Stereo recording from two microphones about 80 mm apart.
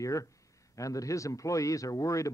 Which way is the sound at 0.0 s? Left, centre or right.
Left.